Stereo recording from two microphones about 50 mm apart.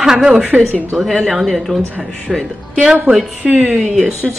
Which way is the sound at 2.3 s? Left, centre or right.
Centre.